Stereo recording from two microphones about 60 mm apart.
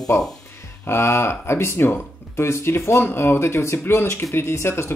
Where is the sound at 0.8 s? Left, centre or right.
Left.